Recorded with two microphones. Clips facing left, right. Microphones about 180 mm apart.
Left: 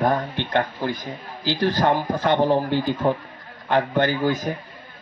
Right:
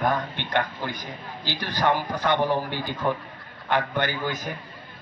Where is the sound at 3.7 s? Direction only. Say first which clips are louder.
Left 5 dB; 45° left (ahead or behind).